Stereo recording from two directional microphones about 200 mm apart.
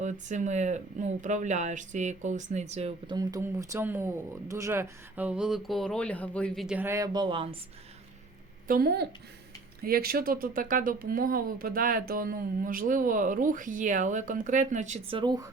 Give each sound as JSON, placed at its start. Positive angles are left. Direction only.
{"t": 0.0, "sound": "speech", "side_deg": -35}
{"t": 3.2, "sound": "speech", "side_deg": -15}
{"t": 6.7, "sound": "speech", "side_deg": -10}
{"t": 8.6, "sound": "speech", "side_deg": -45}